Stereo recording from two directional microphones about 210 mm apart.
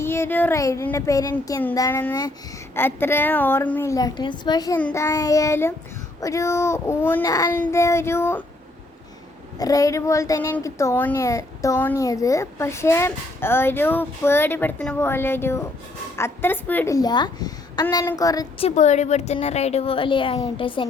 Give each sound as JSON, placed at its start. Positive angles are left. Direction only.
{"t": 0.0, "sound": "a woman's voice", "side_deg": 10}
{"t": 9.6, "sound": "a woman's voice", "side_deg": 15}
{"t": 18.6, "sound": "a woman's voice", "side_deg": 35}